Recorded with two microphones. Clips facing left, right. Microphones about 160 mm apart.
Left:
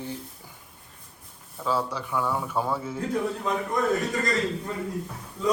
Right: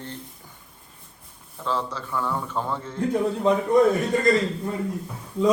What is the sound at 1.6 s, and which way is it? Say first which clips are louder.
A man's voice: left 1 dB; 10° left (ahead or behind).